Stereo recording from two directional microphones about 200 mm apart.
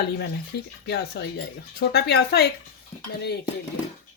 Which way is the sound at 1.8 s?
50° left (ahead or behind).